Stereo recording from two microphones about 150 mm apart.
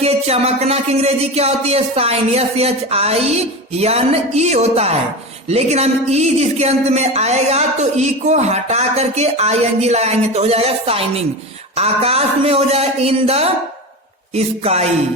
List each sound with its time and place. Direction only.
0.0 s speech: 45° right (ahead or behind)